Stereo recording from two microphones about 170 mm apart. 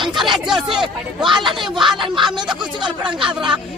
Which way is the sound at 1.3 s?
30° right (ahead or behind).